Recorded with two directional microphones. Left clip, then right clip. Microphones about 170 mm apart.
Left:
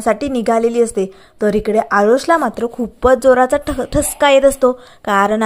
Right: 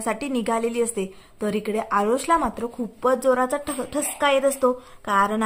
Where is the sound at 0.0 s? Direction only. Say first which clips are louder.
Left 10 dB; 25° left (ahead or behind).